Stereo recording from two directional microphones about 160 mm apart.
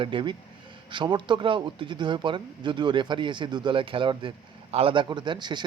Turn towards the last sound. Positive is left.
turn(degrees=-30)  # may be behind; listen again after turning